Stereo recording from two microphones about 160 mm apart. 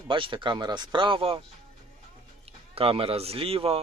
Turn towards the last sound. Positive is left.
turn(degrees=-35)  # may be behind; listen again after turning